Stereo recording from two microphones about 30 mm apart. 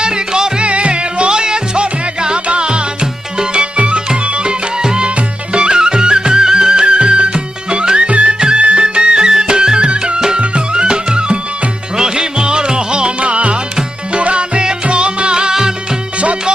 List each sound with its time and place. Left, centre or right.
0.0 s music: right
0.6 s music: right
1.3 s music: right
4.8 s music: right
8.4 s music: right